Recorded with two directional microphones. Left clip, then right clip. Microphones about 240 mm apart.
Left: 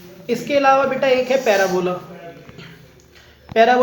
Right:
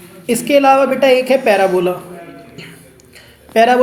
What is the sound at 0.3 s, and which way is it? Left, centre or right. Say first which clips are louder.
Speech: right 5 dB; right.